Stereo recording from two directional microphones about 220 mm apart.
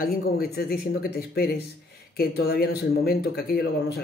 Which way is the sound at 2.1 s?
45° left (ahead or behind).